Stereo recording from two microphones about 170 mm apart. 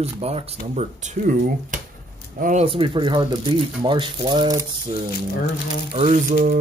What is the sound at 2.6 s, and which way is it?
Speech, 30° right (ahead or behind).